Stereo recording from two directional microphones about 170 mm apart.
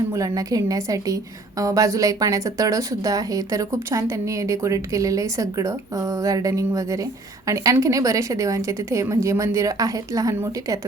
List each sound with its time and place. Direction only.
0.1 s a woman's voice: 20° right (ahead or behind)